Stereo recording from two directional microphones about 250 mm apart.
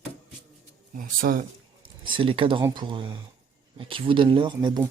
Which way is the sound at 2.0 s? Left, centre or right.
Centre.